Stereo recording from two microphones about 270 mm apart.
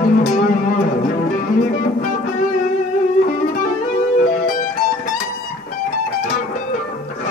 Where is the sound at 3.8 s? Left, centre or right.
Left.